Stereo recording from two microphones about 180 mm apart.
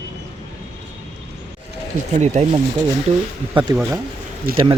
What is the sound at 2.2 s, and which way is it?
Speech, 40° right (ahead or behind).